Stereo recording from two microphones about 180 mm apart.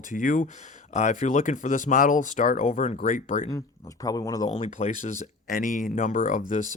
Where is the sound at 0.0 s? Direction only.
45° left (ahead or behind).